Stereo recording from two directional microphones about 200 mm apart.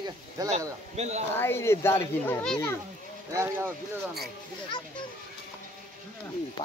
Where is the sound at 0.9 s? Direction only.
35° right (ahead or behind).